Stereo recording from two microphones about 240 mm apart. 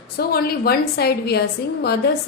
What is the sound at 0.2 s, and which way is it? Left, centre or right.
A woman's voice, left.